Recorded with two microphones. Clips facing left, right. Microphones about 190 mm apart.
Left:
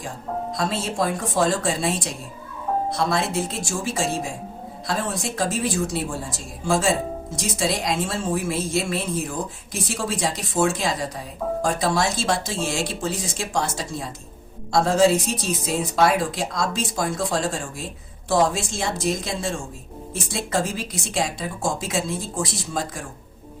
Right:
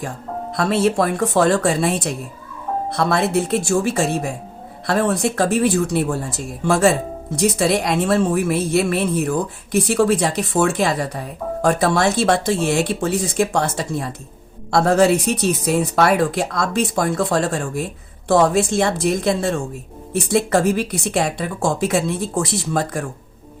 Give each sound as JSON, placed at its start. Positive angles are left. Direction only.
{"t": 0.5, "sound": "a woman's voice", "side_deg": -65}